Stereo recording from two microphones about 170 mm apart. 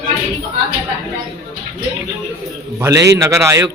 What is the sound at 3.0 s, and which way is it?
Speech, 20° right (ahead or behind).